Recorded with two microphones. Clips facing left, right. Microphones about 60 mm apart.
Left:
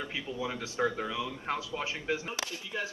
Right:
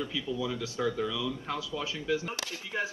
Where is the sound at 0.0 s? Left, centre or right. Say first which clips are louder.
Right 3 dB; left.